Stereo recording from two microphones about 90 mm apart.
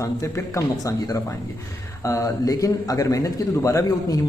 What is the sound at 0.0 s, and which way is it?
A man's voice, 35° left (ahead or behind).